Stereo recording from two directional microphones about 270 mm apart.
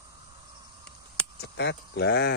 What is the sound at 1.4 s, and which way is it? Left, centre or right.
Speech, left.